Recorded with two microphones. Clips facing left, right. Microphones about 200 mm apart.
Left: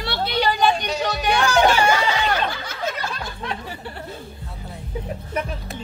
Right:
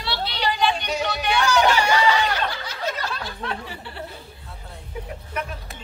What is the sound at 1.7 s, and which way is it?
Snicker, 50° left (ahead or behind).